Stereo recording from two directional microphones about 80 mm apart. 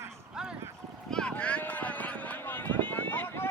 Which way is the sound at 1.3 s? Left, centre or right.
Centre.